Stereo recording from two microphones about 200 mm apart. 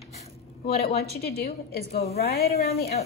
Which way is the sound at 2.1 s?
55° left (ahead or behind).